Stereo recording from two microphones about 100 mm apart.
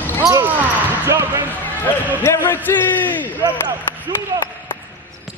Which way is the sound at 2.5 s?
20° left (ahead or behind).